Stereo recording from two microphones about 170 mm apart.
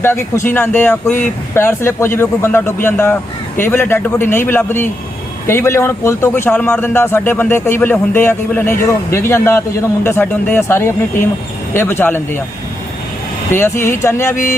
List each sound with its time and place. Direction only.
0.0 s a man's voice: 15° left (ahead or behind)
13.5 s a man's voice: 15° left (ahead or behind)